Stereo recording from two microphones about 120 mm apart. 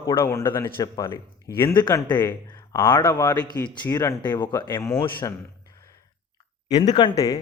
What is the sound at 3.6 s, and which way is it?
Speech, 15° left (ahead or behind).